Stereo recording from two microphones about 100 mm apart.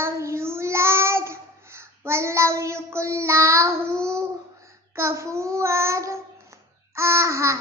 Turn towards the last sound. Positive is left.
turn(degrees=-30)  # may be behind; listen again after turning